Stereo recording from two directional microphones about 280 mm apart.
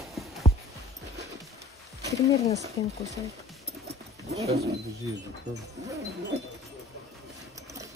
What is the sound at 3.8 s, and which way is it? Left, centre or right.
Wild animals, right.